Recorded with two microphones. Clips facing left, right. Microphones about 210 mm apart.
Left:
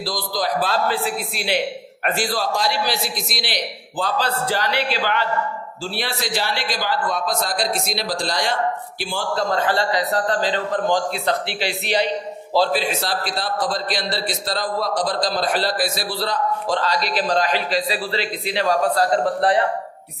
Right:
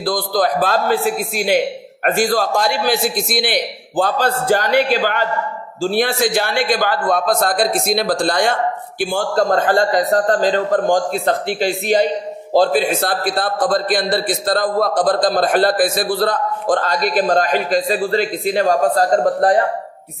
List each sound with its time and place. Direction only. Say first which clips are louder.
0.0 s a man's voice: right 7 dB; 50° right (ahead or behind)